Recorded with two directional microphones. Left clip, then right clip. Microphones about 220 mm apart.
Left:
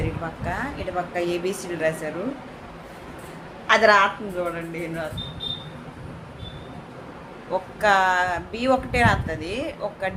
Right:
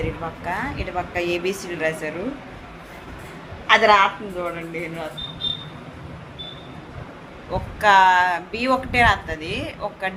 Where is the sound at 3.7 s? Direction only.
20° left (ahead or behind).